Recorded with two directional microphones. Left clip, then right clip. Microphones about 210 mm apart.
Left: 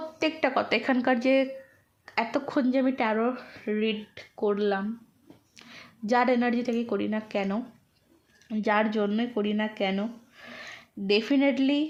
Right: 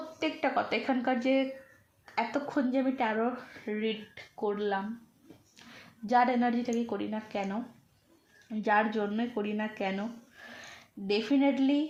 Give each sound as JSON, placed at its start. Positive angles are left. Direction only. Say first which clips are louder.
{"t": 0.2, "sound": "speech", "louder": "left 4 dB", "side_deg": 40}
{"t": 6.1, "sound": "speech", "louder": "left 2 dB", "side_deg": 45}